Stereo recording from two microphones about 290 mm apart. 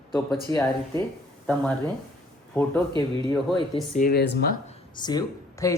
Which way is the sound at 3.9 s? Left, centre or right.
Left.